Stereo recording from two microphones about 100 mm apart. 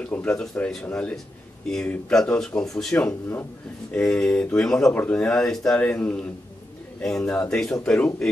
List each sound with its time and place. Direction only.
0.0 s speech: 15° left (ahead or behind)
3.1 s speech: 20° left (ahead or behind)
3.9 s speech: 10° left (ahead or behind)
7.0 s speech: 5° left (ahead or behind)